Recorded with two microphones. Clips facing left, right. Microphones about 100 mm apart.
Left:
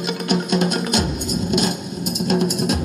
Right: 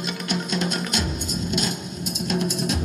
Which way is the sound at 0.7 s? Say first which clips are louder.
Left 6 dB; 15° left (ahead or behind).